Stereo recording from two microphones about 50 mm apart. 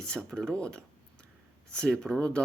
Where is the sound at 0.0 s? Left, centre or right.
Centre.